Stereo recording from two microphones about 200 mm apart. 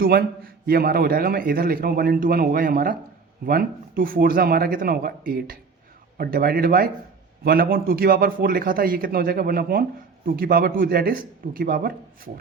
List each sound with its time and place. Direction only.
0.0 s a man's voice: 50° right (ahead or behind)